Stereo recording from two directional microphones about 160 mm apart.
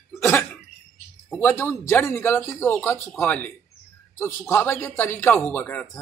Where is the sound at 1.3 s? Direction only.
15° left (ahead or behind).